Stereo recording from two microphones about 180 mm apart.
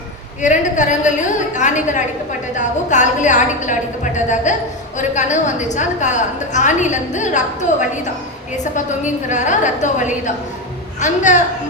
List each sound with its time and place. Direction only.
0.4 s a woman's voice: 45° left (ahead or behind)
9.3 s a woman's voice: 40° left (ahead or behind)